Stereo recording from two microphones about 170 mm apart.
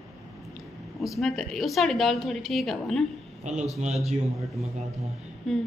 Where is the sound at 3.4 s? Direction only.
45° right (ahead or behind).